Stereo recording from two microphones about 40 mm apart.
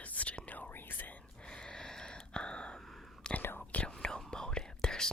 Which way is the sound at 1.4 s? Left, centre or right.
Centre.